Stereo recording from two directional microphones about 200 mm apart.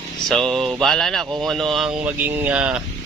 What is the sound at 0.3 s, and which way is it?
Speech, centre (ahead or behind).